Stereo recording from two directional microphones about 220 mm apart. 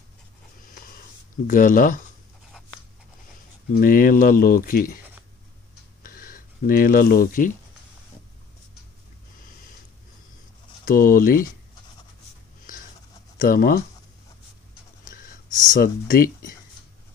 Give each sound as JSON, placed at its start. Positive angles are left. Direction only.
{"t": 0.7, "sound": "a sound", "side_deg": 40}
{"t": 1.5, "sound": "speech", "side_deg": 40}
{"t": 3.7, "sound": "speech", "side_deg": 40}
{"t": 6.0, "sound": "speech", "side_deg": 40}
{"t": 10.9, "sound": "speech", "side_deg": 40}
{"t": 13.4, "sound": "speech", "side_deg": 40}
{"t": 15.0, "sound": "speech", "side_deg": 40}